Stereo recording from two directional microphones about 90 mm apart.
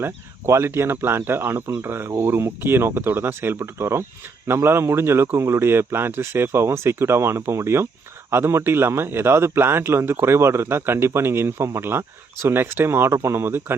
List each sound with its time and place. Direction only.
0.0 s a man's voice: 30° right (ahead or behind)